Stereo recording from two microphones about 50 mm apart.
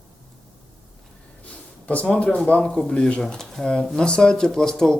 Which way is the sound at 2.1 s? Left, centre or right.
Left.